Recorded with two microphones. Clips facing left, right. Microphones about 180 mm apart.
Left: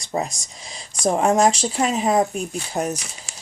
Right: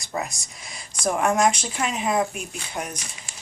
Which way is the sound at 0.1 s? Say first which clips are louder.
Left 5 dB; 30° left (ahead or behind).